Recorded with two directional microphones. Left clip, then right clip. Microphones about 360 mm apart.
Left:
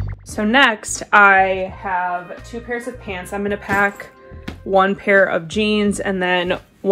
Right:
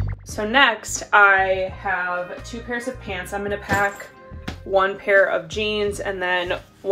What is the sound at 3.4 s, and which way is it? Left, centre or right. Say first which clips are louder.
A woman's voice: left 4 dB; centre.